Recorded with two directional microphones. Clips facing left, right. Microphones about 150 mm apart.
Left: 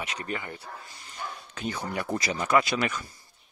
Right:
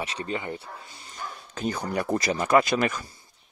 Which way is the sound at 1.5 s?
40° right (ahead or behind).